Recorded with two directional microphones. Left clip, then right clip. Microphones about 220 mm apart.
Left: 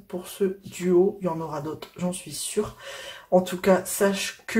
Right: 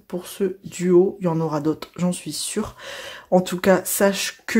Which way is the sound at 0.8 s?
40° right (ahead or behind).